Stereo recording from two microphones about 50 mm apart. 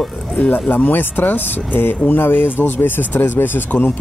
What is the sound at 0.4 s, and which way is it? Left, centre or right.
Speech, left.